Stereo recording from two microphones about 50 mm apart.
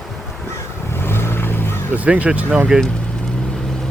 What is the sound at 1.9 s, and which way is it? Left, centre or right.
Speech, right.